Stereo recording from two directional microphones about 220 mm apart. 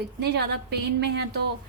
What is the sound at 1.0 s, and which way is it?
Speech, 50° right (ahead or behind).